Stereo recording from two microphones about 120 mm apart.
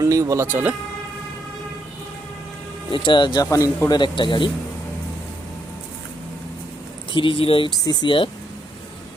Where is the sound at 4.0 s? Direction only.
40° left (ahead or behind).